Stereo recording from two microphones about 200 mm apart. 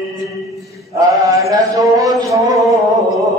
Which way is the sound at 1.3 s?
15° right (ahead or behind).